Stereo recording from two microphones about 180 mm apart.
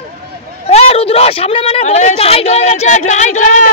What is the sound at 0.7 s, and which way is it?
A man's voice, 35° left (ahead or behind).